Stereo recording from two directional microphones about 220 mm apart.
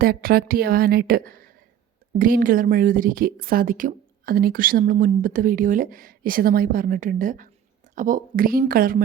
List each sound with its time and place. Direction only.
0.0 s a woman's voice: 45° right (ahead or behind)